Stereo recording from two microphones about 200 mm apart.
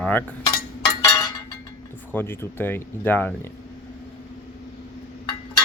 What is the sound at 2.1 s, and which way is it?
Speech, 10° left (ahead or behind).